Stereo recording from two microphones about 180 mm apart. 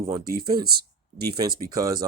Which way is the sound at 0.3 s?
55° right (ahead or behind).